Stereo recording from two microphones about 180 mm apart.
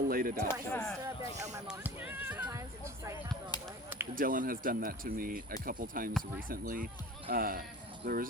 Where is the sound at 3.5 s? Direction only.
25° left (ahead or behind).